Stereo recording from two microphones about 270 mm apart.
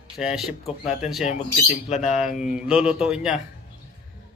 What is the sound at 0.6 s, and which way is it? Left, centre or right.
Speech, left.